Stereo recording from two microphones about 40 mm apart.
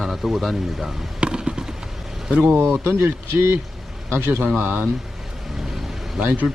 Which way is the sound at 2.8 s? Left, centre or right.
Right.